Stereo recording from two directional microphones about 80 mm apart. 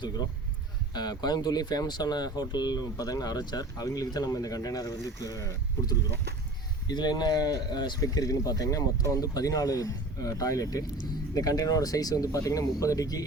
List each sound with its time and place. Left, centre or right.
0.9 s speech: left
6.8 s speech: left
8.0 s speech: left